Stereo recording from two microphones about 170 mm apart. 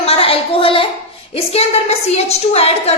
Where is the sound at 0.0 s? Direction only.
35° left (ahead or behind).